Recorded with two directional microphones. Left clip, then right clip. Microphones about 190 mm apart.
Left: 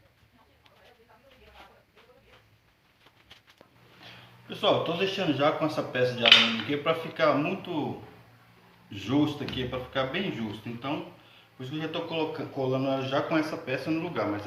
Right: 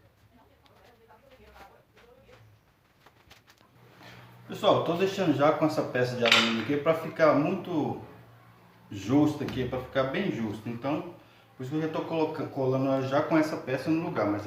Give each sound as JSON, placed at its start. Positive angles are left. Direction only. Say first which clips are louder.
{"t": 4.4, "sound": "a man's voice", "louder": "right 1 dB", "side_deg": -15}
{"t": 8.9, "sound": "speech", "louder": "right 2 dB", "side_deg": -5}
{"t": 11.7, "sound": "speech", "louder": "right 2 dB", "side_deg": -5}
{"t": 12.4, "sound": "a man's voice", "louder": "right 1 dB", "side_deg": -15}